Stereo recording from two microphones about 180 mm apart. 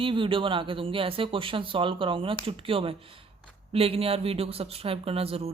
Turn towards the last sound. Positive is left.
turn(degrees=-35)  # may be behind; listen again after turning